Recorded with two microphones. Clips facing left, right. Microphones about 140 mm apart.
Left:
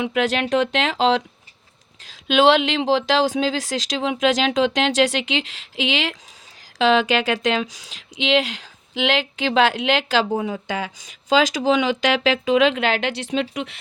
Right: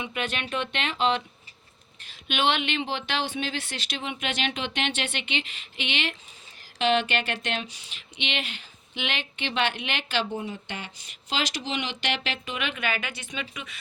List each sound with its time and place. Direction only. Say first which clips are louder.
0.0 s speech: left 11 dB; 90° left
11.9 s speech: left 11 dB; 90° left